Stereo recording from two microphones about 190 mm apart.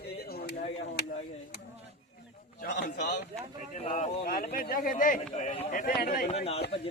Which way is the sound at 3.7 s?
35° left (ahead or behind).